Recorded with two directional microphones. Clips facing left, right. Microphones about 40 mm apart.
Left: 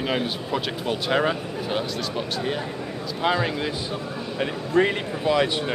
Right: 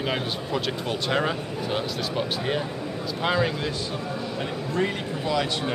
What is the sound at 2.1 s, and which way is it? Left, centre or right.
Speech, centre.